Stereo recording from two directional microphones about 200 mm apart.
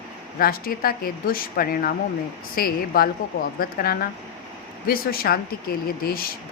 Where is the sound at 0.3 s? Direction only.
50° left (ahead or behind).